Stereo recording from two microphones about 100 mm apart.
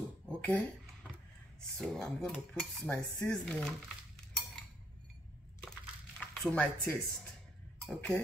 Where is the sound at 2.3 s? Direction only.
15° left (ahead or behind).